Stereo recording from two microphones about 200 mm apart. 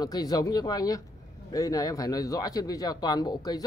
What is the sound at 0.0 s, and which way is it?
A man's voice, 20° left (ahead or behind).